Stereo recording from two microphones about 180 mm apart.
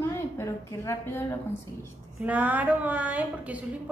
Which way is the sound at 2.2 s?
10° right (ahead or behind).